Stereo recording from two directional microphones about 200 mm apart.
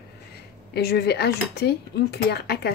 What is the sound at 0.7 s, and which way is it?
Speech, 50° left (ahead or behind).